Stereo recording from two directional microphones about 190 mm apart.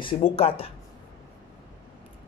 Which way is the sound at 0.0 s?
30° left (ahead or behind).